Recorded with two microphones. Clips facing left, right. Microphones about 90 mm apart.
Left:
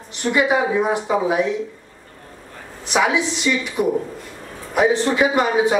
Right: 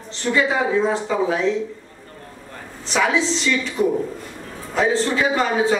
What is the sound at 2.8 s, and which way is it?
Speech, 15° left (ahead or behind).